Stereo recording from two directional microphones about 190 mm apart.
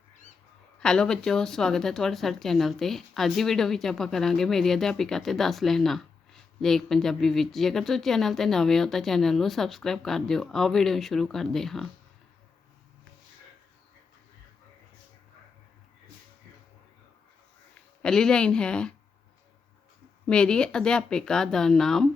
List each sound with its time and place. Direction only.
0.8 s speech: 5° left (ahead or behind)
17.7 s speech: 5° left (ahead or behind)
20.2 s speech: 5° left (ahead or behind)